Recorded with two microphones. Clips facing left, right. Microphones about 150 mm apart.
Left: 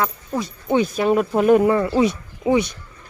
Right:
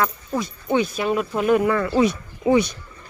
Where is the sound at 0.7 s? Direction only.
40° left (ahead or behind).